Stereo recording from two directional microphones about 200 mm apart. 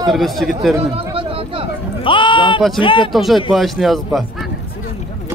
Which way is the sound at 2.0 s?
25° left (ahead or behind).